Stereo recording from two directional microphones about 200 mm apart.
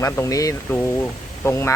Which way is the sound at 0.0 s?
15° left (ahead or behind).